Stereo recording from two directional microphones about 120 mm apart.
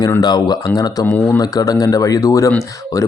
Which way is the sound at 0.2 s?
35° left (ahead or behind).